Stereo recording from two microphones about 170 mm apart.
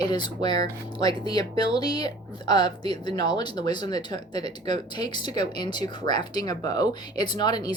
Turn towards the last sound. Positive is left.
turn(degrees=25)  # may be behind; listen again after turning